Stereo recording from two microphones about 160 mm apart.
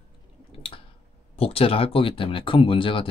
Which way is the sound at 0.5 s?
35° left (ahead or behind).